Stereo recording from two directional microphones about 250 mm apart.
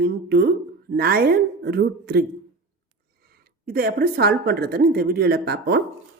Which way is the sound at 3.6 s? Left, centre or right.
Right.